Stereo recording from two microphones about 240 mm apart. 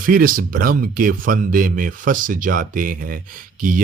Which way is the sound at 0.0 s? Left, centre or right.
Right.